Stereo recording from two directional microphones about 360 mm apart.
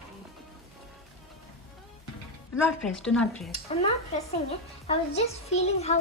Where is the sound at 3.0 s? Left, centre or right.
Centre.